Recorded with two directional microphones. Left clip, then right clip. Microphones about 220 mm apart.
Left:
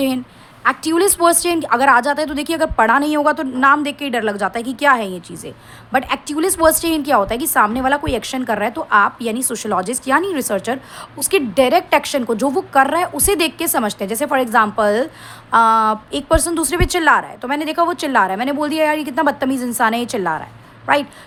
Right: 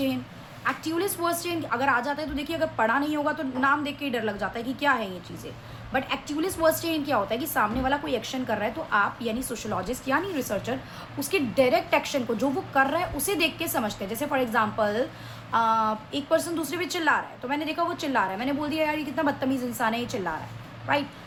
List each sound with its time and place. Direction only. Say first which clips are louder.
0.6 s a woman's voice: left 12 dB; 55° left (ahead or behind)